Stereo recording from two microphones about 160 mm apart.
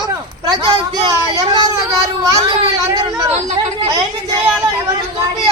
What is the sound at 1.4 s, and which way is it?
A child's voice, 25° right (ahead or behind).